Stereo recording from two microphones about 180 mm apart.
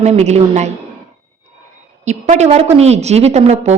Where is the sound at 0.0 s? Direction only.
35° right (ahead or behind).